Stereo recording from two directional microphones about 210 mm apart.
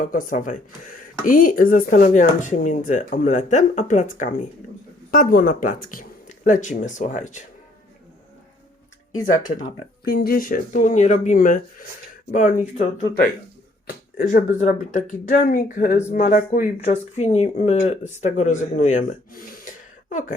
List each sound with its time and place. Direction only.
0.0 s speech: 40° left (ahead or behind)
9.2 s speech: 40° left (ahead or behind)
13.8 s speech: 45° left (ahead or behind)